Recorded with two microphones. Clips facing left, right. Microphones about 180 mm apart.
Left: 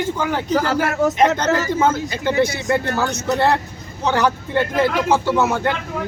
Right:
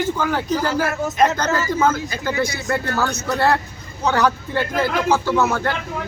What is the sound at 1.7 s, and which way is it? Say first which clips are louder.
A man's voice: left 1 dB; 20° left (ahead or behind).